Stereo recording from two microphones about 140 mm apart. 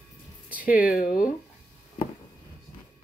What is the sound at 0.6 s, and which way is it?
Speech, 80° left.